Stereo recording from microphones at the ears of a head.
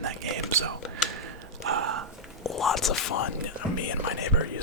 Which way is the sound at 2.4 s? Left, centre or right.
Left.